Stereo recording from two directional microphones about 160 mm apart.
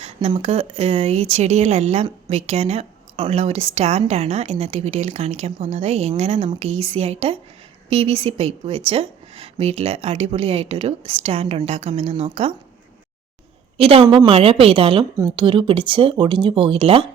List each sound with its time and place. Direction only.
0.0 s a woman's voice: 40° right (ahead or behind)
13.7 s a woman's voice: 35° right (ahead or behind)